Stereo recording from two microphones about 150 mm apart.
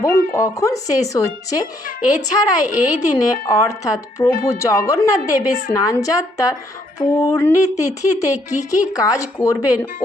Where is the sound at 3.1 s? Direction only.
20° left (ahead or behind).